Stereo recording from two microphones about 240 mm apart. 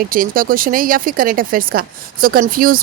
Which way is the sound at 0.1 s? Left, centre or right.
Right.